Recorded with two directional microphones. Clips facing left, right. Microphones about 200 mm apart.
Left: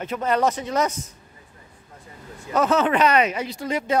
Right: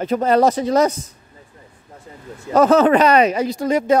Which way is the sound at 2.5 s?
40° right (ahead or behind).